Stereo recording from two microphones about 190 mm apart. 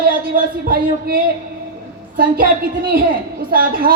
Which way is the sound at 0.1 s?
50° right (ahead or behind).